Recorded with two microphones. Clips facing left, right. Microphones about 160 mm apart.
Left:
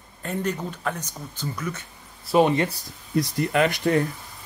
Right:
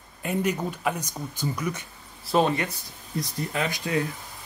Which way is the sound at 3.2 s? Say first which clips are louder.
Left 7 dB; 70° left (ahead or behind).